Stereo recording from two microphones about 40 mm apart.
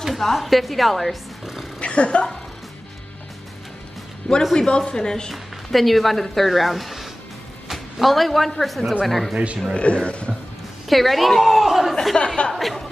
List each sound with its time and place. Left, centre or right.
0.0 s speech: centre
1.4 s music: centre
1.8 s speech: left
4.2 s speech: centre
5.3 s a man's voice: centre
9.9 s speech: left
10.9 s speech: centre